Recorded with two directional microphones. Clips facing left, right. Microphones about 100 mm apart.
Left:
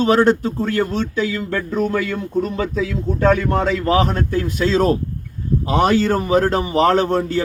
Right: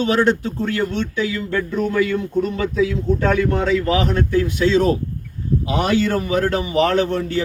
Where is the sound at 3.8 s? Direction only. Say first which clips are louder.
Left 2 dB; 40° left (ahead or behind).